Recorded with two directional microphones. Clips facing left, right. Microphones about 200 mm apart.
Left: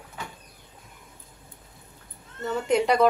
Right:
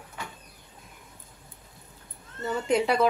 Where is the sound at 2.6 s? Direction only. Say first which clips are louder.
Left 2 dB; centre (ahead or behind).